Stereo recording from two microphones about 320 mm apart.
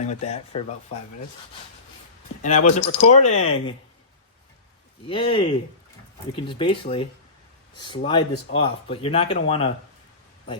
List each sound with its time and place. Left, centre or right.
0.0 s speech: left
2.6 s speech: left
5.0 s speech: centre